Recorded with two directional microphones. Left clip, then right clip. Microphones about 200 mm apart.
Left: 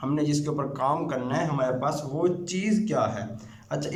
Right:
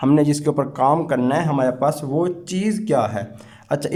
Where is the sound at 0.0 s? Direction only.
40° right (ahead or behind).